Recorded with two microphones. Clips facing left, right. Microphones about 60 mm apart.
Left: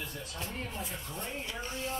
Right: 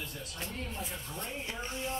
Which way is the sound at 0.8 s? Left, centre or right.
Centre.